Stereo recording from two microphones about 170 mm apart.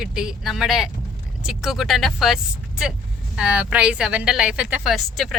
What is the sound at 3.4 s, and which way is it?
Speech, 10° right (ahead or behind).